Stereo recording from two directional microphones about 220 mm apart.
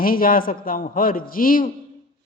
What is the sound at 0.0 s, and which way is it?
A man's voice, 40° left (ahead or behind).